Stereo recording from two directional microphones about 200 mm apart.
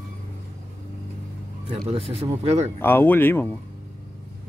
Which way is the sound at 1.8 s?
30° right (ahead or behind).